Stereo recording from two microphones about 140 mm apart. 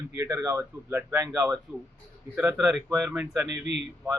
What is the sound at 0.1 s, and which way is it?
Speech, 20° right (ahead or behind).